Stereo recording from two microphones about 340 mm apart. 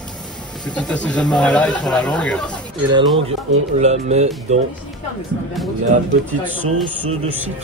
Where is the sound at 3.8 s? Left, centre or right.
Centre.